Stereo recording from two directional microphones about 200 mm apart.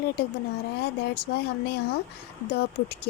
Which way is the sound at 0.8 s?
55° left (ahead or behind).